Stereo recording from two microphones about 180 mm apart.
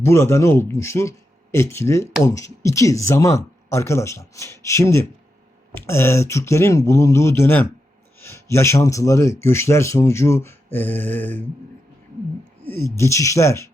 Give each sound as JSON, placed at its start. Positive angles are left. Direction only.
{"t": 0.0, "sound": "speech", "side_deg": 15}
{"t": 12.6, "sound": "speech", "side_deg": 15}